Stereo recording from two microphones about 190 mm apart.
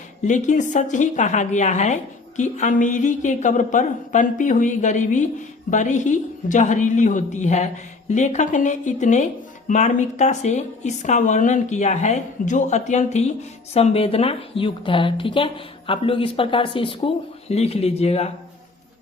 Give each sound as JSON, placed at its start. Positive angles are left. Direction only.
{"t": 0.3, "sound": "a woman's voice", "side_deg": 40}